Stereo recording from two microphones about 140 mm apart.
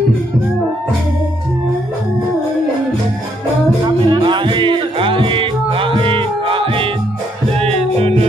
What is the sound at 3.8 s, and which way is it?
Music, 35° right (ahead or behind).